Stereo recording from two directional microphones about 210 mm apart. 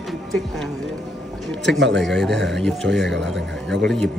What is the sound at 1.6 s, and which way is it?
Speech, 60° right (ahead or behind).